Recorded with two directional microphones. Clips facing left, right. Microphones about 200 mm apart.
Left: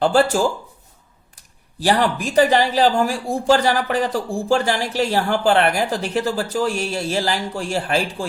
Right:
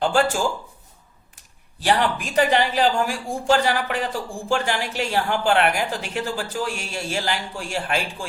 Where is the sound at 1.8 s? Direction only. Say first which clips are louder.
Left 3 dB; 40° left (ahead or behind).